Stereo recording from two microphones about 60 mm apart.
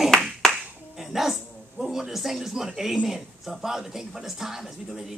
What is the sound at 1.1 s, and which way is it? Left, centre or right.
Dog, centre.